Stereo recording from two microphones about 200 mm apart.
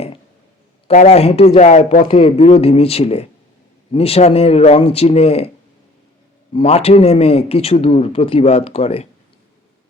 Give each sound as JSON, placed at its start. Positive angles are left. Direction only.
{"t": 0.9, "sound": "speech", "side_deg": 30}
{"t": 6.5, "sound": "speech", "side_deg": 30}